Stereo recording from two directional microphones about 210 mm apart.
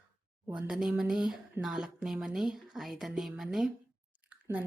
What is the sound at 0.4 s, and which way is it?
Speech, 10° right (ahead or behind).